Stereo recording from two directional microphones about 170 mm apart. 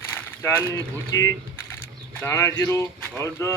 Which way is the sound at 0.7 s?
20° left (ahead or behind).